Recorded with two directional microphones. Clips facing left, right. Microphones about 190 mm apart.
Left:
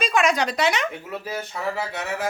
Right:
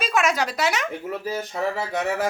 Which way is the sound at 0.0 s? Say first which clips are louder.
Left 1 dB; 5° right (ahead or behind).